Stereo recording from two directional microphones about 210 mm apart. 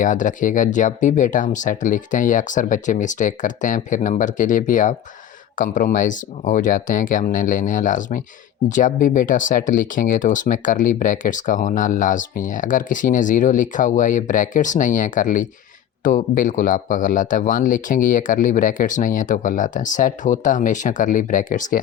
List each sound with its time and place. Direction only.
0.0 s speech: 40° left (ahead or behind)